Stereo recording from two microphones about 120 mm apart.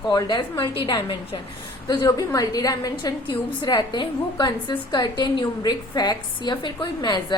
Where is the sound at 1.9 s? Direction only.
35° left (ahead or behind).